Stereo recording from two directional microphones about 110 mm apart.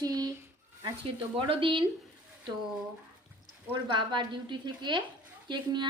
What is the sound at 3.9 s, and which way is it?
Speech, 45° right (ahead or behind).